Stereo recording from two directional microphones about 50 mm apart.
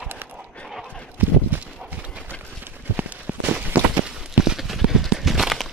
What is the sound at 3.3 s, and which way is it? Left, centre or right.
Walk, right.